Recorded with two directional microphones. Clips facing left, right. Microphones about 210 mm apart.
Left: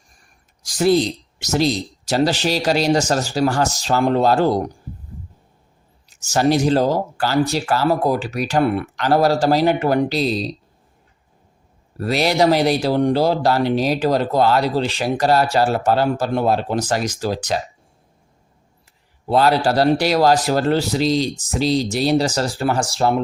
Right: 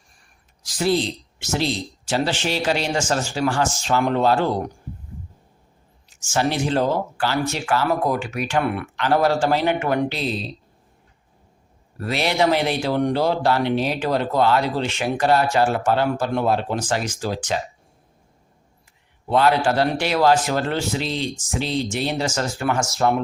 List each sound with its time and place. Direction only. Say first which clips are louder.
1.4 s speech: left 5 dB; 40° left (ahead or behind)
6.1 s speech: left 5 dB; 40° left (ahead or behind)
11.9 s speech: left 4 dB; 35° left (ahead or behind)
19.3 s speech: left 2 dB; 35° left (ahead or behind)